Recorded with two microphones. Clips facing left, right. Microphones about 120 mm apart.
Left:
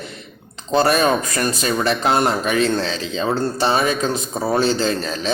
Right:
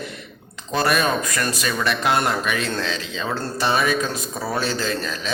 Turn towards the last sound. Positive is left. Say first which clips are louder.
# left 4 dB
turn(degrees=30)  # may be behind; listen again after turning